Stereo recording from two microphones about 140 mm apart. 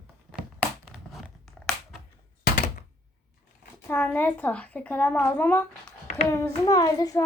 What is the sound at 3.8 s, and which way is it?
A woman's voice, 15° left (ahead or behind).